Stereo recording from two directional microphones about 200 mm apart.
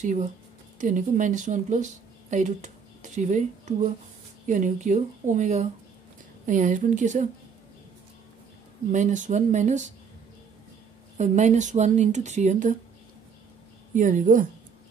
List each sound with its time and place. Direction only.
0.0 s speech: 35° right (ahead or behind)
8.9 s speech: 40° right (ahead or behind)
11.1 s speech: 35° right (ahead or behind)
13.9 s speech: 40° right (ahead or behind)